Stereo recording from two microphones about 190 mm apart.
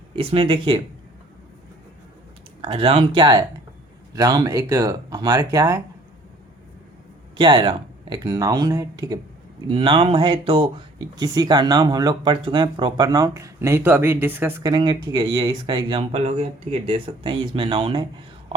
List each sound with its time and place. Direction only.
0.2 s speech: 30° right (ahead or behind)
2.6 s speech: 30° right (ahead or behind)
7.3 s speech: 25° right (ahead or behind)
14.7 s speech: 20° right (ahead or behind)